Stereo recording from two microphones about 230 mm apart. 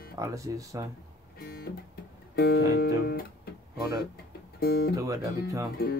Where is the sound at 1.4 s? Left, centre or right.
Left.